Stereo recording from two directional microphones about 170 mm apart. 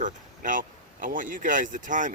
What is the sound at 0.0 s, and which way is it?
Speech, 50° right (ahead or behind).